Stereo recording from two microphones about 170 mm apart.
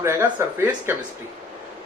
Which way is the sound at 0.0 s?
15° right (ahead or behind).